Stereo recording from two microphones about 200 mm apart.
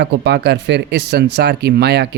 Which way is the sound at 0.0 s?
55° right (ahead or behind).